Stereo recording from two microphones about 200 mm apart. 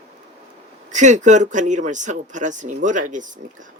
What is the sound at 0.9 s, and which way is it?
Speech, 35° right (ahead or behind).